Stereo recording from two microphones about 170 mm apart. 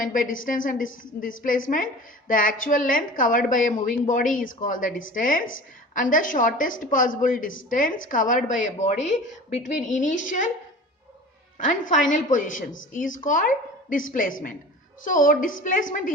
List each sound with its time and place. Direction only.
0.0 s a woman's voice: 55° left (ahead or behind)
11.5 s a woman's voice: 50° left (ahead or behind)